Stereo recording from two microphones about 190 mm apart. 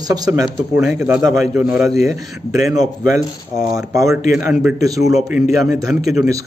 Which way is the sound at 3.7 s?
15° right (ahead or behind).